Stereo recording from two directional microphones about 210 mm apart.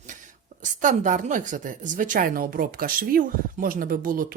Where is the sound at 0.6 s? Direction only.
35° right (ahead or behind).